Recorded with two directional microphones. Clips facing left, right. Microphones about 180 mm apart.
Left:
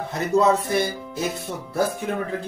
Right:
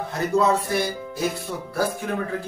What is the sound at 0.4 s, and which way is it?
Speech, 20° left (ahead or behind).